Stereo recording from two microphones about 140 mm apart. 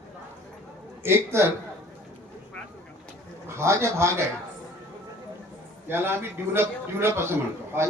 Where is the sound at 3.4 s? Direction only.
20° right (ahead or behind).